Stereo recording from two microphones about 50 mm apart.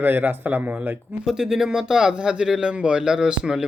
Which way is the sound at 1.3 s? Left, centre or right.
Centre.